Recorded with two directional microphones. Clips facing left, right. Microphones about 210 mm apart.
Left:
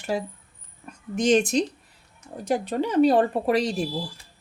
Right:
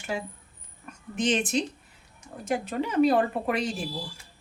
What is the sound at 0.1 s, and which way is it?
A woman's voice, 35° left (ahead or behind).